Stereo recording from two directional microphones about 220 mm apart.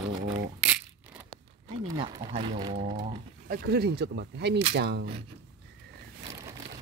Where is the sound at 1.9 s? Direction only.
20° right (ahead or behind).